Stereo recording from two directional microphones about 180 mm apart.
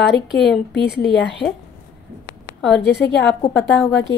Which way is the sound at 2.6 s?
80° left.